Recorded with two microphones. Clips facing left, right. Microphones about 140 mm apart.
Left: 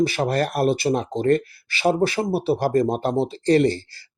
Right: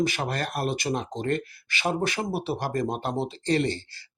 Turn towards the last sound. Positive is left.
turn(degrees=40)  # may be behind; listen again after turning